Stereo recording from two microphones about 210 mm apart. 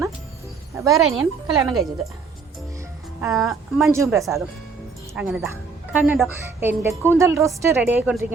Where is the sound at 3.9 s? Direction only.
15° right (ahead or behind).